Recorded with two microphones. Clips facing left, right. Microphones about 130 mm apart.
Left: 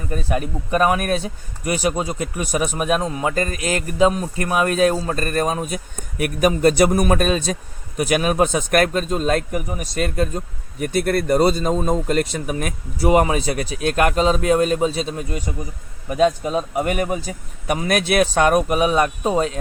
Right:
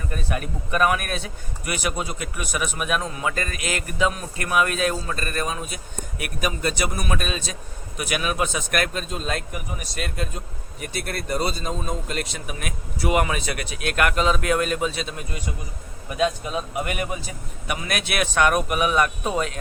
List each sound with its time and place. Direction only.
0.1 s a man's voice: 30° left (ahead or behind)